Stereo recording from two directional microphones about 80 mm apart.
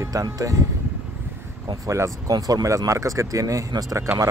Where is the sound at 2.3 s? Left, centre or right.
Right.